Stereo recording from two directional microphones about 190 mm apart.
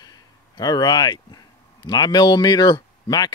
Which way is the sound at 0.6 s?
20° left (ahead or behind).